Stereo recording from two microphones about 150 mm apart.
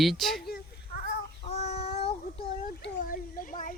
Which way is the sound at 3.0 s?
70° left (ahead or behind).